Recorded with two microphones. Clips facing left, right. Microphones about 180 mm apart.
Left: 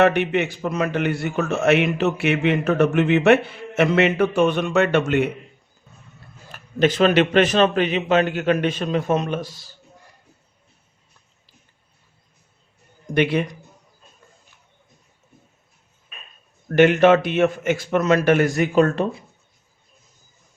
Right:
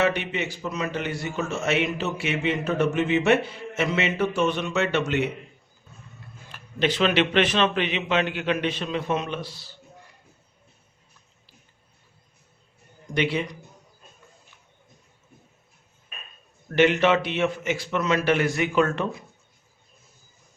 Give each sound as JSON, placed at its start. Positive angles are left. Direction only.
{"t": 0.0, "sound": "a man's voice", "side_deg": 60}
{"t": 6.5, "sound": "a man's voice", "side_deg": 45}
{"t": 13.1, "sound": "a man's voice", "side_deg": 50}
{"t": 16.6, "sound": "a man's voice", "side_deg": 50}